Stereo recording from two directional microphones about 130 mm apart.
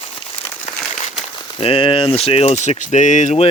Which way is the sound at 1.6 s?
45° left (ahead or behind).